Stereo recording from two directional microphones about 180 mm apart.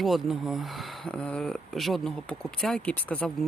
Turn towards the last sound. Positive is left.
turn(degrees=10)  # may be behind; listen again after turning